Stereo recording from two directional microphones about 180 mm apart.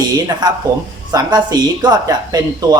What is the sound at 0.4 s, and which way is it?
Speech, 25° right (ahead or behind).